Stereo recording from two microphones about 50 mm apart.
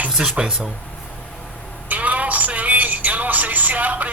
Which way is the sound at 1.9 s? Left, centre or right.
Right.